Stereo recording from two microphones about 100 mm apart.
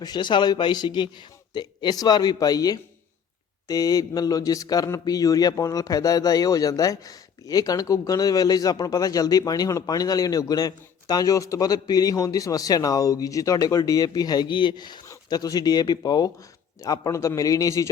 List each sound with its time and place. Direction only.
0.0 s a man's voice: 45° left (ahead or behind)